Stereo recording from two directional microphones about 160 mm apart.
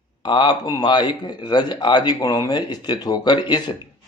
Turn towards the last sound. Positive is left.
turn(degrees=25)  # may be behind; listen again after turning